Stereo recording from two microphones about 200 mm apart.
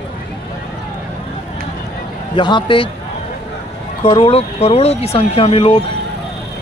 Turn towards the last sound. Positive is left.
turn(degrees=25)  # may be behind; listen again after turning